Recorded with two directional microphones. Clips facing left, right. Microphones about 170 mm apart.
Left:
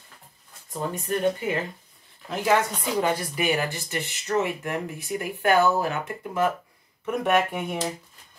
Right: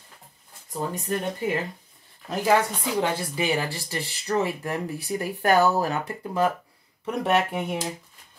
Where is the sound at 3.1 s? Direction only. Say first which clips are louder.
Even; 30° right (ahead or behind).